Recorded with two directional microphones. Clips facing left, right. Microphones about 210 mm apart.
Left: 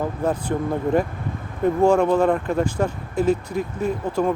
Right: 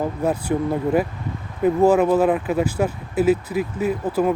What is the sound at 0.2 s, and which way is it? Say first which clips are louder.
Speech: right 1 dB; 10° right (ahead or behind).